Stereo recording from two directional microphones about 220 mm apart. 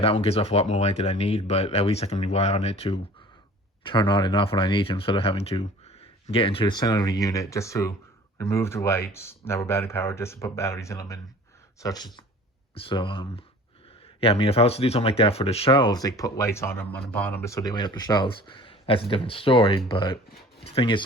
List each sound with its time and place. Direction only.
0.0 s speech: 25° left (ahead or behind)